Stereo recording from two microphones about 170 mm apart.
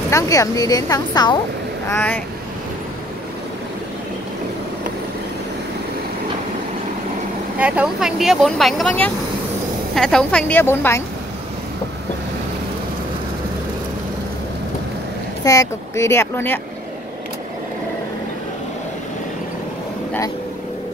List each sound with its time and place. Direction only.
0.1 s a woman's voice: 20° left (ahead or behind)
1.9 s speech: 10° left (ahead or behind)
7.5 s speech: 10° right (ahead or behind)
9.9 s speech: 5° left (ahead or behind)
15.4 s speech: 20° left (ahead or behind)